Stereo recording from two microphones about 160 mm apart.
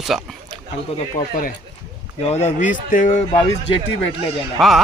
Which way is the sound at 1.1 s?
55° left (ahead or behind).